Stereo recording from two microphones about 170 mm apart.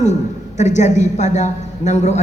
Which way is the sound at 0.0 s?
45° left (ahead or behind).